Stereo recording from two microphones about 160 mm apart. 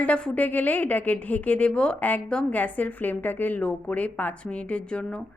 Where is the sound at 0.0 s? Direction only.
5° left (ahead or behind).